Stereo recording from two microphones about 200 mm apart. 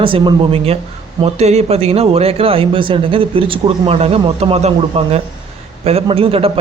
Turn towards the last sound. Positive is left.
turn(degrees=-30)  # may be behind; listen again after turning